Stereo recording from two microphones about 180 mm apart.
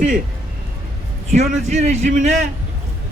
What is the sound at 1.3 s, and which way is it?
A man's voice, 40° right (ahead or behind).